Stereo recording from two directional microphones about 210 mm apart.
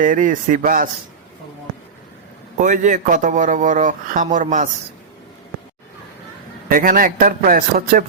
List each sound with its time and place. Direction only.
0.0 s speech: 40° right (ahead or behind)
2.6 s speech: 35° right (ahead or behind)
6.7 s speech: 40° right (ahead or behind)